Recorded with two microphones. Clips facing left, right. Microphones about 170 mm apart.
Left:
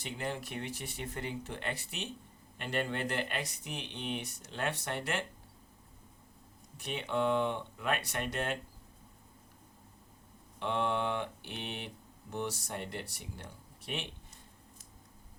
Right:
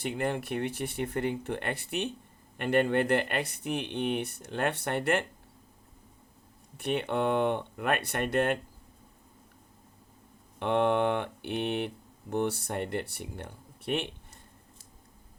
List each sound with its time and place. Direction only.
0.0 s speech: 60° right (ahead or behind)
6.7 s speech: 60° right (ahead or behind)
10.6 s speech: 55° right (ahead or behind)